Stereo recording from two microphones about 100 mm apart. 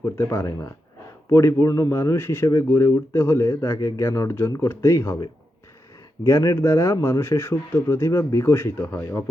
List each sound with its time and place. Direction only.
0.0 s speech: 30° left (ahead or behind)